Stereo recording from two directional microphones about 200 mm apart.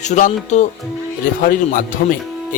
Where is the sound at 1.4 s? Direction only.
45° left (ahead or behind).